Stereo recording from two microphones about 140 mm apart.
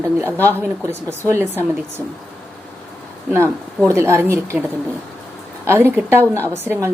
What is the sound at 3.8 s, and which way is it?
Speech, 20° right (ahead or behind).